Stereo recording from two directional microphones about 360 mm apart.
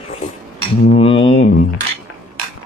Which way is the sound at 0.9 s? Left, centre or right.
Centre.